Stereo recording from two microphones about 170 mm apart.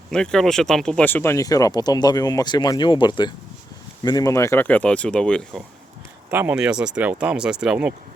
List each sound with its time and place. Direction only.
0.1 s speech: 5° left (ahead or behind)
6.3 s speech: 10° right (ahead or behind)